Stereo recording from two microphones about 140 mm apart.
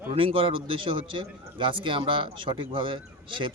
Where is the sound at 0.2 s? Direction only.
40° right (ahead or behind).